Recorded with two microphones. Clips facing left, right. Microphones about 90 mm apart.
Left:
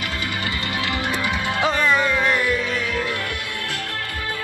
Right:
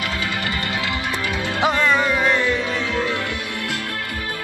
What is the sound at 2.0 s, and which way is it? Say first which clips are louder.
Music: right 1 dB; 20° right (ahead or behind).